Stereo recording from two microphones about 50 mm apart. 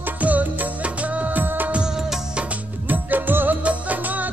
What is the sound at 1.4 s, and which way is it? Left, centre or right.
Music of bollywood, right.